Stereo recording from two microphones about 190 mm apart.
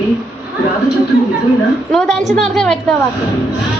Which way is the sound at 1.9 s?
Centre (ahead or behind).